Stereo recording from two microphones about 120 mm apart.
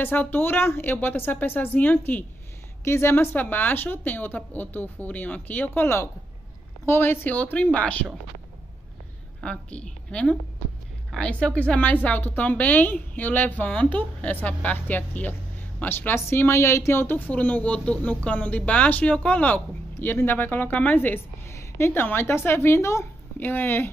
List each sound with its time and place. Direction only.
0.0 s speech: 15° left (ahead or behind)
9.4 s a woman's voice: 10° left (ahead or behind)